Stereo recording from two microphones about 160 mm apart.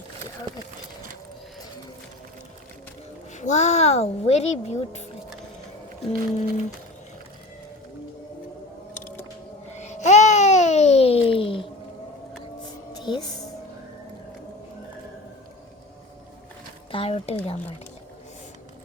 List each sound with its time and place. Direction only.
3.3 s speech: 45° left (ahead or behind)
6.1 s a sound: 40° left (ahead or behind)
9.7 s babbling: 45° left (ahead or behind)
13.0 s music: 25° left (ahead or behind)
16.9 s speech: 35° left (ahead or behind)